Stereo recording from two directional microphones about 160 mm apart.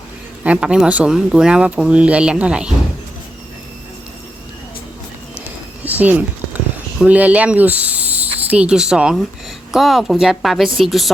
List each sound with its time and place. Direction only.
0.4 s speech: 5° right (ahead or behind)
5.8 s a sound: 10° right (ahead or behind)
7.0 s speech: 10° right (ahead or behind)